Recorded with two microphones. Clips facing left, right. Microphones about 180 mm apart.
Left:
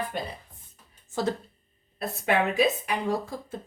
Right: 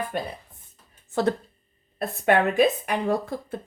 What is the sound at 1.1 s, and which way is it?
Speech, 60° right (ahead or behind).